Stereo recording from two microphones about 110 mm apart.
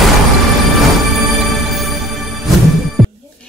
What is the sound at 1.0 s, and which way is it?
Music, centre (ahead or behind).